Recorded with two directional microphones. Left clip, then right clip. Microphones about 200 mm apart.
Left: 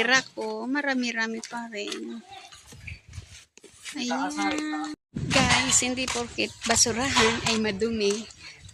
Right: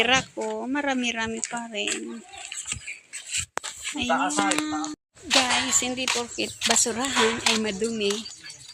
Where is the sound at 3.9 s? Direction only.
5° left (ahead or behind).